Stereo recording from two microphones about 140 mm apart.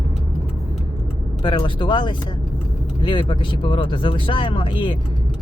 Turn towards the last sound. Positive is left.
turn(degrees=35)  # may be behind; listen again after turning